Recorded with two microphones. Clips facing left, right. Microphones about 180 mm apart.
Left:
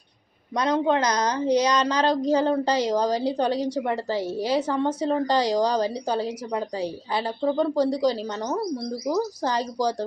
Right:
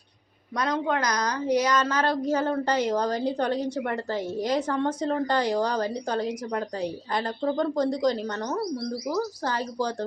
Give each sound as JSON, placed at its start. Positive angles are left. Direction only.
{"t": 0.5, "sound": "a woman's voice", "side_deg": 20}